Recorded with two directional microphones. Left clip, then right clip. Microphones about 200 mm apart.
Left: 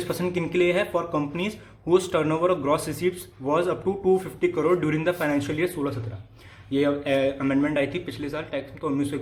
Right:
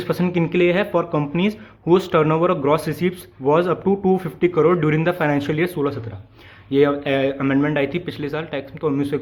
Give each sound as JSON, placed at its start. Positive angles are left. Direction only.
{"t": 0.0, "sound": "speech", "side_deg": -45}